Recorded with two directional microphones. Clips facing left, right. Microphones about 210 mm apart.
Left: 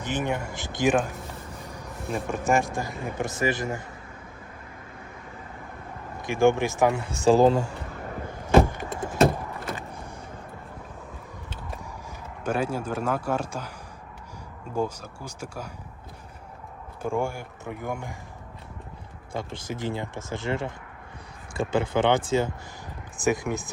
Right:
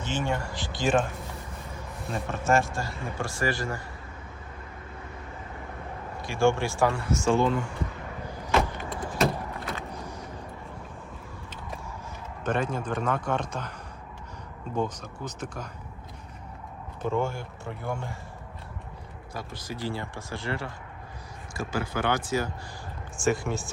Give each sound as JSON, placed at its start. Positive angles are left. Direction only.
{"t": 0.0, "sound": "a man's voice", "side_deg": 15}
{"t": 2.2, "sound": "a man's voice", "side_deg": 15}
{"t": 6.2, "sound": "speech", "side_deg": 20}
{"t": 7.3, "sound": "speech", "side_deg": 35}
{"t": 8.5, "sound": "a sound", "side_deg": 50}
{"t": 9.9, "sound": "vehicle", "side_deg": 55}
{"t": 12.5, "sound": "a man's voice", "side_deg": 10}
{"t": 14.8, "sound": "a man's voice", "side_deg": 10}
{"t": 17.0, "sound": "a man's voice", "side_deg": 10}
{"t": 19.3, "sound": "a man's voice", "side_deg": 25}